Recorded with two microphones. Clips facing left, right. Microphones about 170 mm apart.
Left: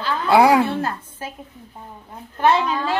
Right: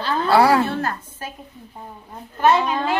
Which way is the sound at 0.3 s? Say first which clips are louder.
Left 2 dB; 15° left (ahead or behind).